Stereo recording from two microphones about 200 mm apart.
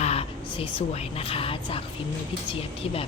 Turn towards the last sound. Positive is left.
turn(degrees=30)  # may be behind; listen again after turning